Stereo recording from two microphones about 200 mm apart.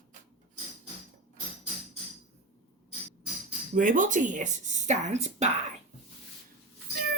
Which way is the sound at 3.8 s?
40° right (ahead or behind).